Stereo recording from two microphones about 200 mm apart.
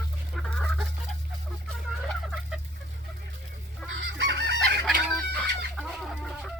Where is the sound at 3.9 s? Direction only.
65° right (ahead or behind).